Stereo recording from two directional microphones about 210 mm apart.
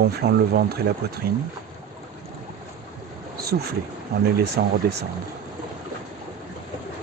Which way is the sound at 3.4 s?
50° right (ahead or behind).